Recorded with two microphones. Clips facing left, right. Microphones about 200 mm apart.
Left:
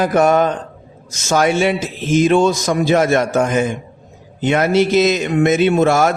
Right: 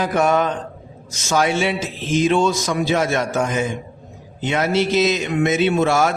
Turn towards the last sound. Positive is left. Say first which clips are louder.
# left 4 dB
turn(degrees=50)  # may be behind; listen again after turning